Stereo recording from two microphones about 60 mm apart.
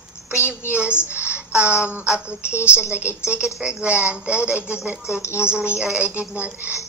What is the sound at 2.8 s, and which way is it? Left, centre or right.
A woman's voice, right.